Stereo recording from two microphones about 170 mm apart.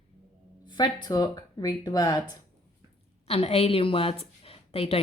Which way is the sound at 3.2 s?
35° left (ahead or behind).